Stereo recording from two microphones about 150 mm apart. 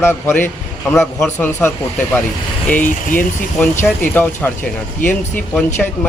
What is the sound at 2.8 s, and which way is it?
Speech, 65° left (ahead or behind).